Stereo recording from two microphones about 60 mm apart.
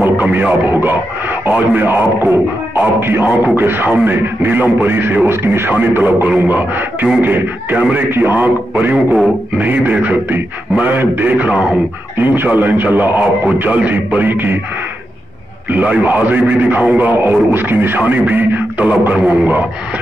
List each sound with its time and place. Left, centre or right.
0.0 s a man's voice: right
5.7 s a man's voice: right
12.2 s a man's voice: right
13.2 s a man's voice: right
15.7 s speech: right